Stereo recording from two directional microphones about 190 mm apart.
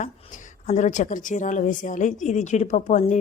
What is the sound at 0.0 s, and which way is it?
A woman's voice, 40° left (ahead or behind).